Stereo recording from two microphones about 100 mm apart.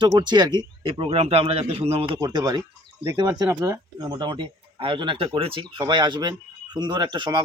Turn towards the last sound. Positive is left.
turn(degrees=-50)  # may be behind; listen again after turning